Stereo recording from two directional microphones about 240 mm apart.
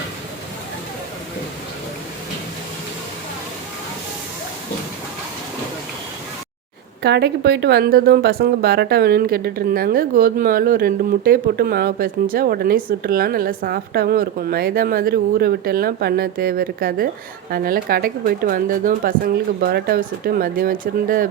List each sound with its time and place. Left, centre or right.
7.0 s a woman's voice: right